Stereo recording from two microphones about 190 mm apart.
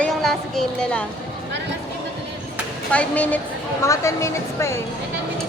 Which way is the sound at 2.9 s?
5° left (ahead or behind).